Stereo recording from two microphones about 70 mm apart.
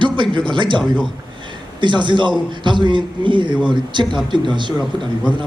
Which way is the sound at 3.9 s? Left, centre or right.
Right.